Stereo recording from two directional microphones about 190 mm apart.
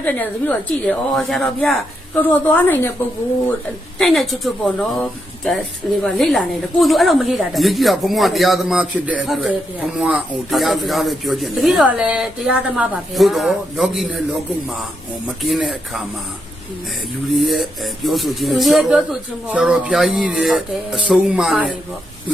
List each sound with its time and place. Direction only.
0.0 s a woman's voice: 10° left (ahead or behind)
3.9 s a woman's voice: centre (ahead or behind)
15.3 s a woman's voice: centre (ahead or behind)
17.3 s a woman's voice: centre (ahead or behind)